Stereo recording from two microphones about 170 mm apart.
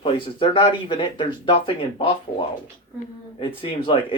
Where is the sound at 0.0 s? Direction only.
30° left (ahead or behind).